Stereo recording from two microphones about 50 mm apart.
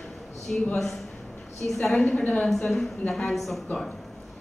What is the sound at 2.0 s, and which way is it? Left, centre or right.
Speech, left.